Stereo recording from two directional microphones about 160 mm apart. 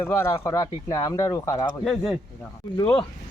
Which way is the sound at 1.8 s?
Centre (ahead or behind).